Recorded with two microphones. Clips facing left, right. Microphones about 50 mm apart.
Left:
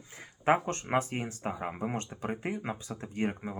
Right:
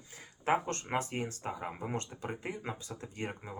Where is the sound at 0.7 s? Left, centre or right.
Left.